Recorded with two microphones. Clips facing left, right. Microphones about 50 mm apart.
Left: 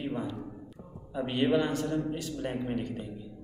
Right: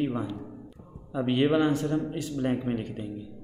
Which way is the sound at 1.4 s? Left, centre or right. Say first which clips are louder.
Right 1 dB; right.